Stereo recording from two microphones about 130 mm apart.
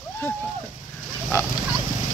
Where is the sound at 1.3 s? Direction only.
20° left (ahead or behind).